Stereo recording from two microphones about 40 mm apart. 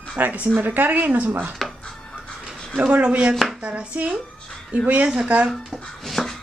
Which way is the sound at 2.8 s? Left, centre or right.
Right.